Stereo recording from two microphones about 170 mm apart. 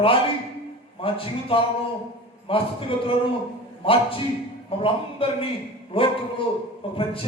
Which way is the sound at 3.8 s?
30° left (ahead or behind).